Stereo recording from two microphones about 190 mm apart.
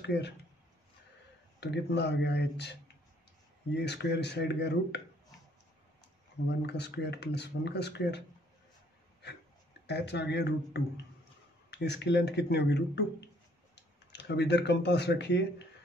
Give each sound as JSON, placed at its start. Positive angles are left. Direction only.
{"t": 0.0, "sound": "speech", "side_deg": 65}
{"t": 1.6, "sound": "speech", "side_deg": 65}
{"t": 6.6, "sound": "speech", "side_deg": 60}
{"t": 9.8, "sound": "speech", "side_deg": 60}